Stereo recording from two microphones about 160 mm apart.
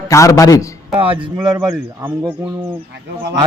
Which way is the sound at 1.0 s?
35° right (ahead or behind).